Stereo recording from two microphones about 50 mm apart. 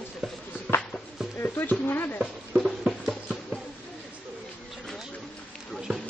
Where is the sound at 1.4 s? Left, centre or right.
Left.